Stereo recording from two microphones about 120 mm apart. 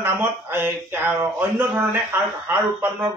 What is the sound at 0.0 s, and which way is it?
A man's voice, 20° right (ahead or behind).